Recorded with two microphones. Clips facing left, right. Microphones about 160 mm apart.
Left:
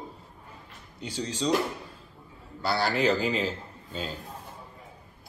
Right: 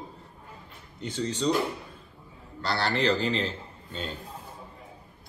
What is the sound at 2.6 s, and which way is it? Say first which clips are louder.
Speech: left 1 dB; 10° left (ahead or behind).